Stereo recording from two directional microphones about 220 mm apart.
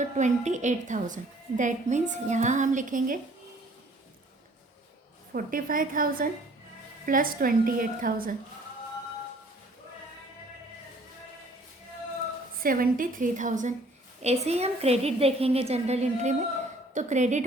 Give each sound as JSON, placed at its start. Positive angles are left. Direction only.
{"t": 0.0, "sound": "a woman's voice", "side_deg": -35}
{"t": 5.3, "sound": "a woman's voice", "side_deg": -40}
{"t": 12.6, "sound": "a woman's voice", "side_deg": -40}